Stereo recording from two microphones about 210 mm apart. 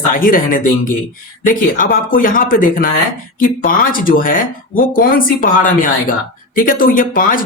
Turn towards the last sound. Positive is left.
turn(degrees=40)  # may be behind; listen again after turning